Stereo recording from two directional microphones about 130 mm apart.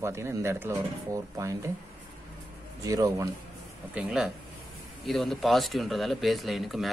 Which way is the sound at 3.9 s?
10° right (ahead or behind).